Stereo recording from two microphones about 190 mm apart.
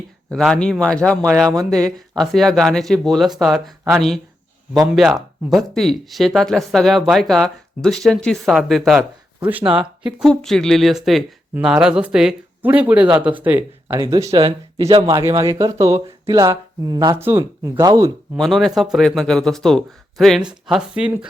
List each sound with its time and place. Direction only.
0.3 s speech: 5° left (ahead or behind); by 18.1 s 15° right (ahead or behind)
18.3 s speech: centre (ahead or behind)